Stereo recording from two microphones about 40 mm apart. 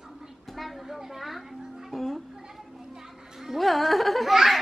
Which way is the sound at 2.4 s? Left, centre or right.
Centre.